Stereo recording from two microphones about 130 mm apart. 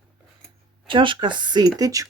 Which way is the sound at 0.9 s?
40° right (ahead or behind).